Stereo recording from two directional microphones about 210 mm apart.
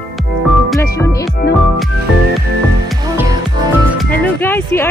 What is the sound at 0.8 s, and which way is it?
Music, 15° left (ahead or behind).